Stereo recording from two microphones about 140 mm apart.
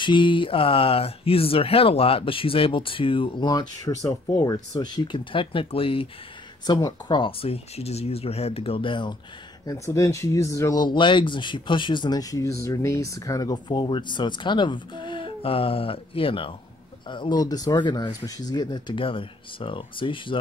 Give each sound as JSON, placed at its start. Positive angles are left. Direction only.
{"t": 0.0, "sound": "speech", "side_deg": 35}
{"t": 9.7, "sound": "speech", "side_deg": 25}